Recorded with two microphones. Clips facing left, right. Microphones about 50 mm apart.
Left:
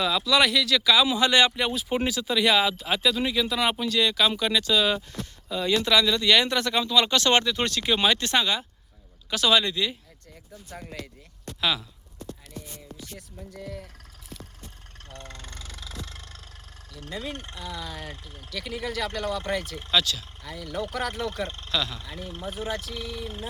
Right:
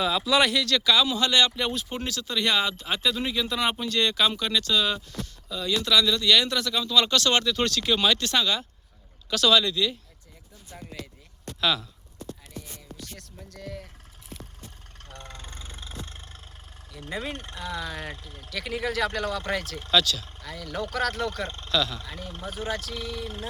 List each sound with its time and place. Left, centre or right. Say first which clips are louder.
0.0 s speech: even; centre
5.2 s speech: left 4 dB; left
6.8 s speech: right 1 dB; centre
11.6 s speech: right 1 dB; centre
15.2 s vehicle: even; left
17.1 s speech: right 2 dB; centre
19.8 s speech: right 4 dB; centre